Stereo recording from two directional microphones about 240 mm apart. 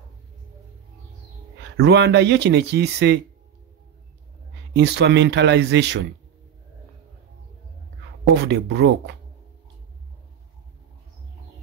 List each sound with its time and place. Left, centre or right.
1.8 s speech: right
4.7 s speech: right
8.4 s speech: right